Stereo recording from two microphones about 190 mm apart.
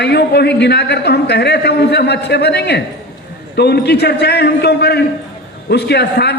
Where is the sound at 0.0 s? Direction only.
60° left (ahead or behind).